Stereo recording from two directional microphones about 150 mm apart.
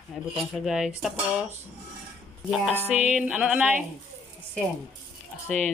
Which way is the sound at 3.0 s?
10° right (ahead or behind).